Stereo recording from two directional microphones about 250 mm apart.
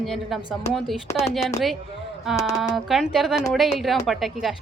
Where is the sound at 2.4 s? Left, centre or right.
Centre.